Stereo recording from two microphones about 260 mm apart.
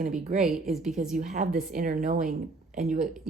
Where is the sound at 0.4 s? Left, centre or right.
Centre.